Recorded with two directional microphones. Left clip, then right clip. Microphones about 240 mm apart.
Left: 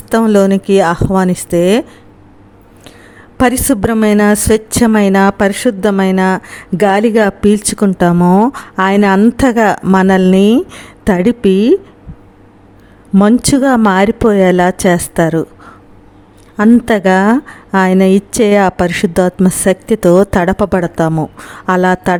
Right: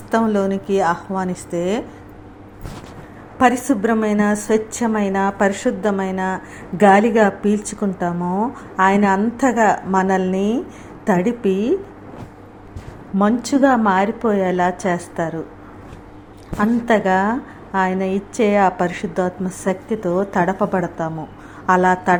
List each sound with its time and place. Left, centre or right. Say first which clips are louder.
0.1 s a woman's voice: left 8 dB; left
3.3 s a woman's voice: left 4 dB; left
13.1 s a woman's voice: left 7 dB; left
16.6 s a woman's voice: left 7 dB; left